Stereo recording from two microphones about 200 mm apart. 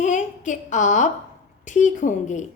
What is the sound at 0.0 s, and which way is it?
A woman's voice, 40° left (ahead or behind).